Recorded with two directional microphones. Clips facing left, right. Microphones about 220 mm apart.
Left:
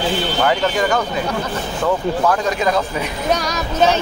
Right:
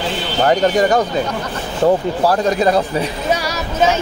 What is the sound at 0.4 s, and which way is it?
Speech, 35° right (ahead or behind).